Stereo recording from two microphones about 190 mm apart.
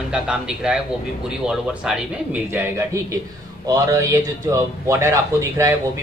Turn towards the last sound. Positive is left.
turn(degrees=-15)  # may be behind; listen again after turning